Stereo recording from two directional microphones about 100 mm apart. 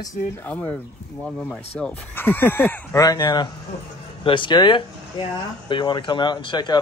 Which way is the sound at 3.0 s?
40° left (ahead or behind).